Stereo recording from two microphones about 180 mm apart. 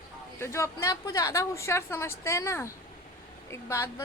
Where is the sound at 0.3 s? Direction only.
15° left (ahead or behind).